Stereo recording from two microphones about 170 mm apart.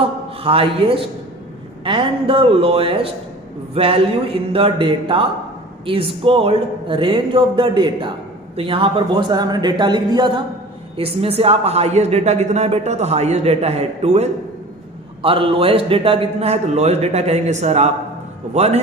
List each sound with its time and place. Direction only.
0.0 s a man's voice: 35° right (ahead or behind)